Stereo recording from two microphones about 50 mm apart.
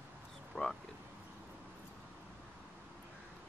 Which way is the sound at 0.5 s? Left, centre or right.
Left.